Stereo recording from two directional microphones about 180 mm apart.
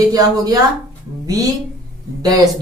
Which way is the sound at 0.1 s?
20° right (ahead or behind).